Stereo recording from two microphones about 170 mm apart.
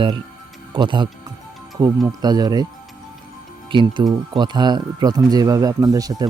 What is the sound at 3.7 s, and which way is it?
Speech, 30° right (ahead or behind).